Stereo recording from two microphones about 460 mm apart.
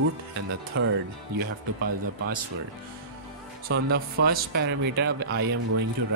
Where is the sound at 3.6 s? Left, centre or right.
Right.